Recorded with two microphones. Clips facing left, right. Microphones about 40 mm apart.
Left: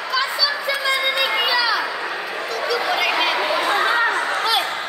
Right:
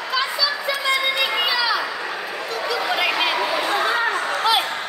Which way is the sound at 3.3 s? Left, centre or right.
Centre.